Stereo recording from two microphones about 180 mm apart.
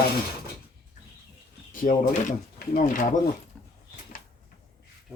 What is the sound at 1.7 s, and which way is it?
Speech, 45° left (ahead or behind).